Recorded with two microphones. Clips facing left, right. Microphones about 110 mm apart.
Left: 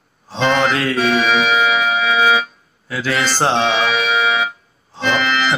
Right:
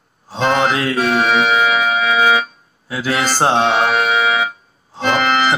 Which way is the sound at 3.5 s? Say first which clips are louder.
Right 3 dB; 50° right (ahead or behind).